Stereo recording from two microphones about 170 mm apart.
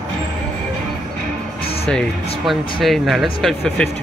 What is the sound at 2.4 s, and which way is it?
Speech, centre (ahead or behind).